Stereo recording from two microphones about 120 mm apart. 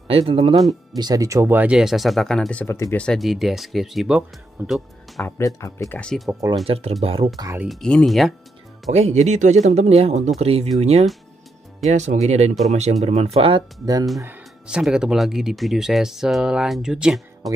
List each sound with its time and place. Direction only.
0.1 s speech: 55° right (ahead or behind)
0.9 s speech: 35° right (ahead or behind); by 2.6 s 5° left (ahead or behind)
2.6 s speech: 20° left (ahead or behind)
3.0 s speech: centre (ahead or behind)
5.4 s speech: 25° left (ahead or behind)
5.9 s speech: 5° left (ahead or behind)
6.7 s speech: 60° right (ahead or behind)
7.6 s speech: 5° left (ahead or behind)
8.9 s speech: 70° right (ahead or behind); by 13.7 s 50° right (ahead or behind)
14.2 s speech: 10° right (ahead or behind)